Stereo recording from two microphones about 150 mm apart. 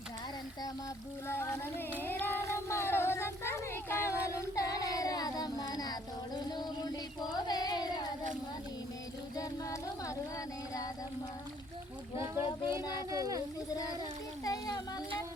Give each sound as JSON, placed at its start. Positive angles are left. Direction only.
{"t": 1.3, "sound": "music", "side_deg": 15}
{"t": 2.6, "sound": "child singing", "side_deg": 15}
{"t": 9.3, "sound": "a sound", "side_deg": 25}
{"t": 12.1, "sound": "a child's voice", "side_deg": -20}
{"t": 12.8, "sound": "speech", "side_deg": 25}
{"t": 13.1, "sound": "speech", "side_deg": -20}
{"t": 14.4, "sound": "a sound", "side_deg": 25}